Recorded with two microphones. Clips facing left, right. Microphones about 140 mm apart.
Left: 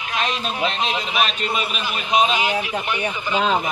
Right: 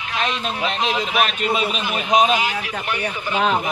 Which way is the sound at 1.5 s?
20° right (ahead or behind).